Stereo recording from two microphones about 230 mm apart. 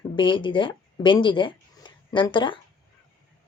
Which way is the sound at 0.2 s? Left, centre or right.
Left.